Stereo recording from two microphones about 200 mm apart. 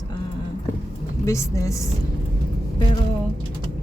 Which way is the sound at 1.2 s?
15° left (ahead or behind).